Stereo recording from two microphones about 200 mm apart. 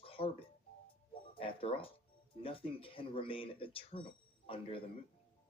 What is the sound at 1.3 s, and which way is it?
Speech, 25° left (ahead or behind).